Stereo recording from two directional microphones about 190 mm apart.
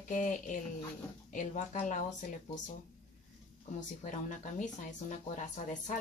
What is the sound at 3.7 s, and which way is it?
Speech, 40° left (ahead or behind).